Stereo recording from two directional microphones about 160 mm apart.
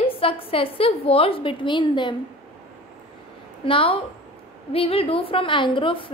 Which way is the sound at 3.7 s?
35° left (ahead or behind).